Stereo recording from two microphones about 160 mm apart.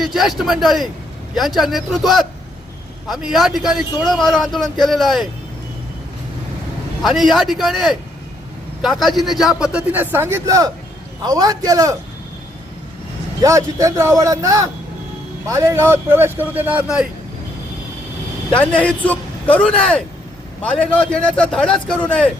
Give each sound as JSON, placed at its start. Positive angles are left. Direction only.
{"t": 0.0, "sound": "a man's voice", "side_deg": 0}
{"t": 7.0, "sound": "a man's voice", "side_deg": 0}
{"t": 13.4, "sound": "a man's voice", "side_deg": -20}
{"t": 18.5, "sound": "speech", "side_deg": 10}